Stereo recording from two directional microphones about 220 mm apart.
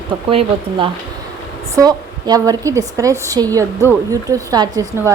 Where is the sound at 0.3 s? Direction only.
25° right (ahead or behind).